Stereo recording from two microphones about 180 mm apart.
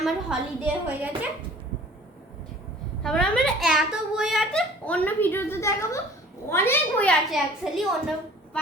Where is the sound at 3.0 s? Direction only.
5° left (ahead or behind).